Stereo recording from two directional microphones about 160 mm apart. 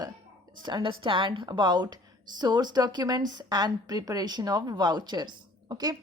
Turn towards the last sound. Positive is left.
turn(degrees=-25)  # may be behind; listen again after turning